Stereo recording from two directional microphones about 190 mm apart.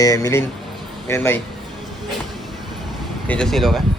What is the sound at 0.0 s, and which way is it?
A man's voice, 15° left (ahead or behind).